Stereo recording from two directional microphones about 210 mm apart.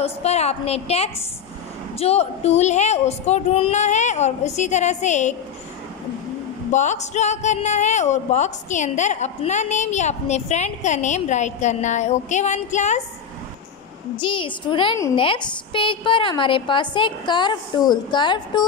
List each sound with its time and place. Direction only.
0.0 s a woman's voice: 30° left (ahead or behind)
6.7 s speech: 35° left (ahead or behind)
14.1 s a woman's voice: 25° left (ahead or behind)